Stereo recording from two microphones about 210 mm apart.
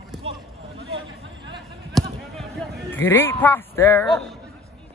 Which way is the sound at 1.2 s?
20° right (ahead or behind).